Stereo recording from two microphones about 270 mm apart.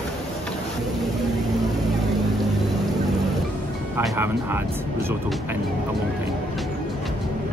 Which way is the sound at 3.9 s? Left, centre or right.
Centre.